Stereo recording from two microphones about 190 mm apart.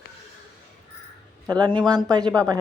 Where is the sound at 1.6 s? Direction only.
25° right (ahead or behind).